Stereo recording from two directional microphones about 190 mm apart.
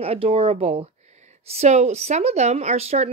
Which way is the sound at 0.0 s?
30° right (ahead or behind).